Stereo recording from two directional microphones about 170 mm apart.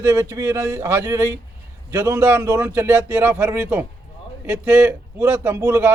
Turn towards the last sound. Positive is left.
turn(degrees=-15)  # may be behind; listen again after turning